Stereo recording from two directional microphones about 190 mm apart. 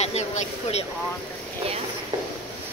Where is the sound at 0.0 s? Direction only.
35° left (ahead or behind).